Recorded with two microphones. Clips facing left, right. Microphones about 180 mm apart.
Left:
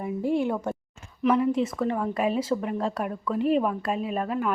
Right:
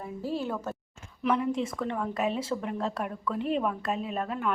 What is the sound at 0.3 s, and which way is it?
Speech, 15° left (ahead or behind).